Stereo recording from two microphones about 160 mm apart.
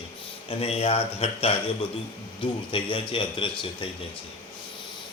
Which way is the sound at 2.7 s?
35° left (ahead or behind).